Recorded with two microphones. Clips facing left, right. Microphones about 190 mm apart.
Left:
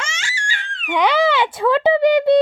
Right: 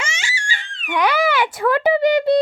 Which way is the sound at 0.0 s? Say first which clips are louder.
Right 1 dB; 5° right (ahead or behind).